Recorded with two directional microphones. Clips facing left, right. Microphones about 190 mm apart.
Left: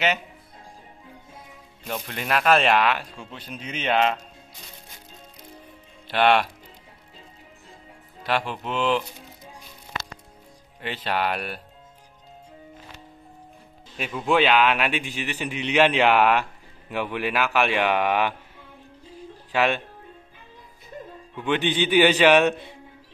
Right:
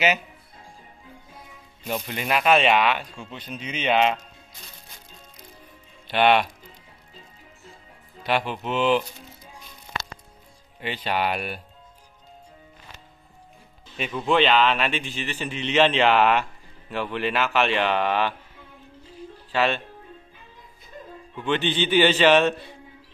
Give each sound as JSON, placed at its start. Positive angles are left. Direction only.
{"t": 1.9, "sound": "speech", "side_deg": -5}
{"t": 6.0, "sound": "speech", "side_deg": -5}
{"t": 8.2, "sound": "speech", "side_deg": 0}
{"t": 10.8, "sound": "speech", "side_deg": 0}
{"t": 13.9, "sound": "a man's voice", "side_deg": 5}
{"t": 19.5, "sound": "a man's voice", "side_deg": 10}
{"t": 21.4, "sound": "a man's voice", "side_deg": 10}